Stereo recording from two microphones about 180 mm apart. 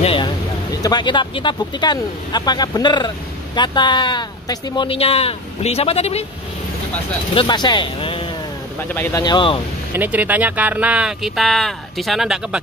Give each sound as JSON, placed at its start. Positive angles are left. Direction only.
{"t": 0.0, "sound": "a sound", "side_deg": 30}
{"t": 0.8, "sound": "speech", "side_deg": 25}
{"t": 7.3, "sound": "speech", "side_deg": 25}
{"t": 8.7, "sound": "speech", "side_deg": 10}
{"t": 9.2, "sound": "speech", "side_deg": 25}
{"t": 9.9, "sound": "speech", "side_deg": -10}